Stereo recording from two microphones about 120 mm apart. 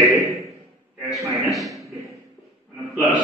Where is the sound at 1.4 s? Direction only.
Centre (ahead or behind).